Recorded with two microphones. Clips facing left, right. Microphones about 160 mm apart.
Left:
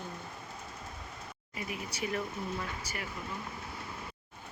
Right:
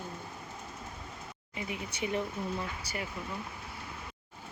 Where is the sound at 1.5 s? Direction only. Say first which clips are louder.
Right 1 dB; 25° right (ahead or behind).